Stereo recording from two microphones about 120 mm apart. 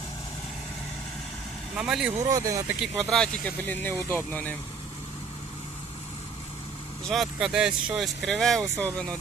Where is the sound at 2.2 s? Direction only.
25° right (ahead or behind).